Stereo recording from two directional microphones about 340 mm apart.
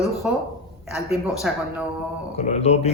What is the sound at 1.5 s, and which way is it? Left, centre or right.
Speech, centre.